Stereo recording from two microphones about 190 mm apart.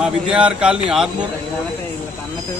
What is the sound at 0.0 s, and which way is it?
A man's voice, 5° right (ahead or behind).